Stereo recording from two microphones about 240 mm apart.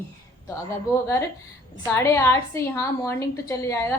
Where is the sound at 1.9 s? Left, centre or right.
Centre.